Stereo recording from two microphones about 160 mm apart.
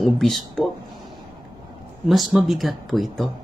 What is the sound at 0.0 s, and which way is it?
Speech, centre (ahead or behind).